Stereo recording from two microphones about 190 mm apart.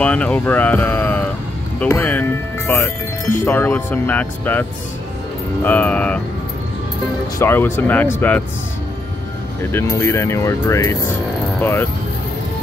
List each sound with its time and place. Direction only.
0.0 s speech: 5° left (ahead or behind)
7.3 s speech: 10° left (ahead or behind)
9.7 s speech: 15° left (ahead or behind)